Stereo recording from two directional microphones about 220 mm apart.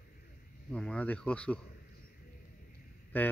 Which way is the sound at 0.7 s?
5° left (ahead or behind).